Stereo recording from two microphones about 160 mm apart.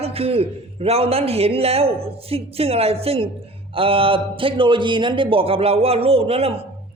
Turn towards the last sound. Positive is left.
turn(degrees=-40)  # may be behind; listen again after turning